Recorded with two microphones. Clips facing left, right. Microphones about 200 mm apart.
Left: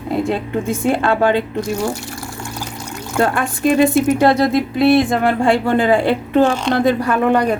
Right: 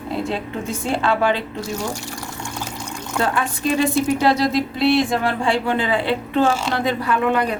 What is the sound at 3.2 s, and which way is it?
A woman's voice, 50° left (ahead or behind).